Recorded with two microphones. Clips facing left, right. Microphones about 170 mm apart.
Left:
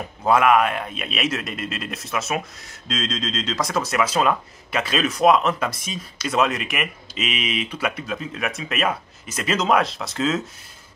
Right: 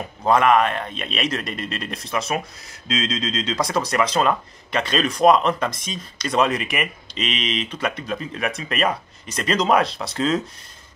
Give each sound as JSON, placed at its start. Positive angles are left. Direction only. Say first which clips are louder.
{"t": 0.3, "sound": "speech", "louder": "even", "side_deg": 5}